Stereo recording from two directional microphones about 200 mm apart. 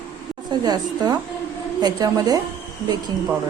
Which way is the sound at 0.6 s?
20° right (ahead or behind).